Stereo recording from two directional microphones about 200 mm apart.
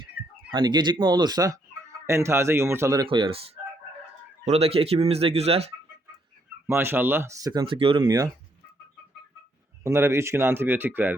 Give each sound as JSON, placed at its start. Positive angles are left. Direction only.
{"t": 0.5, "sound": "speech", "side_deg": -20}
{"t": 6.7, "sound": "speech", "side_deg": -10}
{"t": 9.8, "sound": "speech", "side_deg": -15}